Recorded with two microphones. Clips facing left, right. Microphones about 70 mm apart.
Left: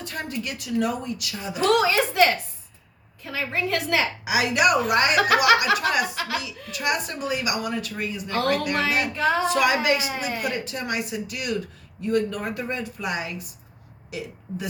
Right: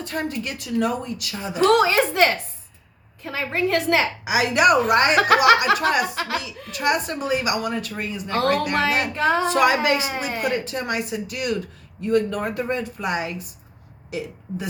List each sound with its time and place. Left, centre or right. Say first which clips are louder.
0.0 s a woman's voice: right 4 dB; right